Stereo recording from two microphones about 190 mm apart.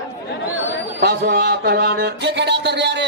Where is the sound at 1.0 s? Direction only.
60° right (ahead or behind).